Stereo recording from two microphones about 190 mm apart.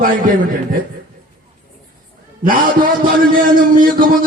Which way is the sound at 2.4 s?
45° right (ahead or behind).